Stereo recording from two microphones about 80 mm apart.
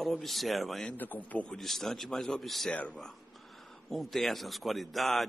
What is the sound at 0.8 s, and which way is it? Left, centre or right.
Speech, left.